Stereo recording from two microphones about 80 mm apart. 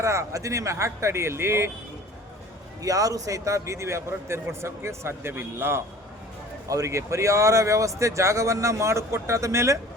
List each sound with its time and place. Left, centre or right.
0.0 s speech: right
2.8 s speech: right
6.7 s speech: right